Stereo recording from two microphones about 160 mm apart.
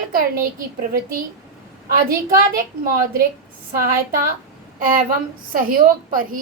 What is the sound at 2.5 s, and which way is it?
A woman's voice, 65° right (ahead or behind).